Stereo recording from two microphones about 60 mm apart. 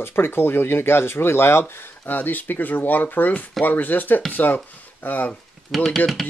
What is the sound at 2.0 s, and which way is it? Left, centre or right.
Speech, left.